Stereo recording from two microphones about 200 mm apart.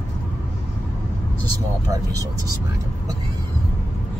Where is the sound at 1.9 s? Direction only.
15° right (ahead or behind).